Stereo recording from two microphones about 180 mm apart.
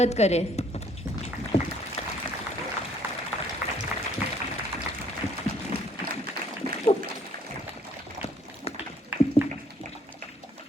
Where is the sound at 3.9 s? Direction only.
5° right (ahead or behind).